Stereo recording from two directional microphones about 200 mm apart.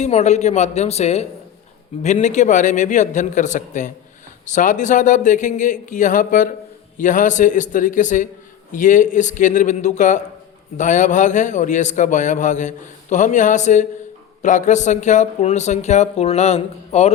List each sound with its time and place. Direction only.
0.0 s a man's voice: 35° left (ahead or behind)